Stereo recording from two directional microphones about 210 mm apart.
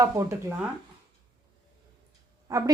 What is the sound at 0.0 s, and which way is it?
Speech, 15° right (ahead or behind).